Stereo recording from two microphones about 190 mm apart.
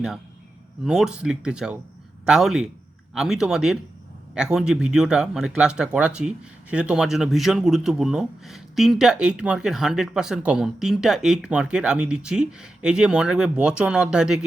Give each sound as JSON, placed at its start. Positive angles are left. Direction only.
{"t": 0.9, "sound": "speech", "side_deg": 0}